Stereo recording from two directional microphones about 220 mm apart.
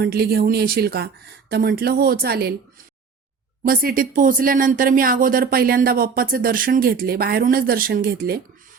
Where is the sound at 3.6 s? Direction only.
40° right (ahead or behind).